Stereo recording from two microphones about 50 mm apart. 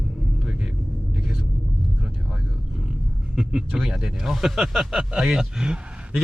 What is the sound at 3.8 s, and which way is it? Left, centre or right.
Speech, centre.